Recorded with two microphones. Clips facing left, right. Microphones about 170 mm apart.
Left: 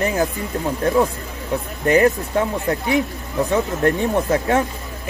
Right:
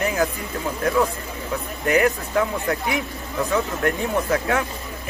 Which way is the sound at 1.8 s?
30° left (ahead or behind).